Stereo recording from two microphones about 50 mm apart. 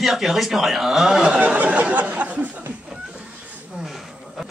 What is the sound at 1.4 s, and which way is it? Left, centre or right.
Speech, right.